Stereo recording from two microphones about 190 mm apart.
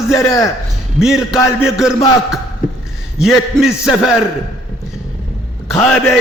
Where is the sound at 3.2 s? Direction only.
Centre (ahead or behind).